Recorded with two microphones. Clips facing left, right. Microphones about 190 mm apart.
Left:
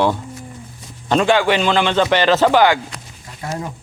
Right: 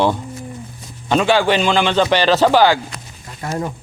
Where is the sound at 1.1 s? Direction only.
10° right (ahead or behind).